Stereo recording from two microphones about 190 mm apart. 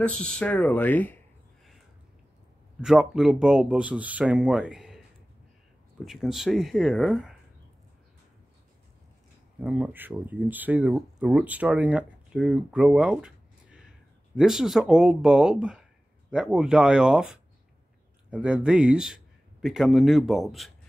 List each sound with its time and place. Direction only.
0.0 s speech: 5° left (ahead or behind)
2.8 s speech: 5° right (ahead or behind)
6.0 s speech: centre (ahead or behind)
9.6 s a man's voice: 5° right (ahead or behind)